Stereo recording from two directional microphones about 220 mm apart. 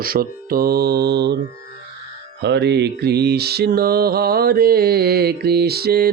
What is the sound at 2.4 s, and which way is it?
Music, 50° right (ahead or behind).